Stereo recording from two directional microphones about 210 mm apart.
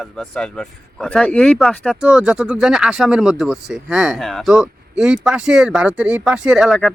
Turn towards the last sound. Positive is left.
turn(degrees=0)  # may be behind; listen again after turning